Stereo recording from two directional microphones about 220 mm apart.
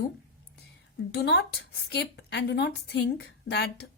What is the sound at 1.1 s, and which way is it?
A woman's voice, 45° left (ahead or behind).